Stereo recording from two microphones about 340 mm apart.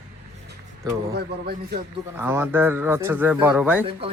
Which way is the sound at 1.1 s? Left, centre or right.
Right.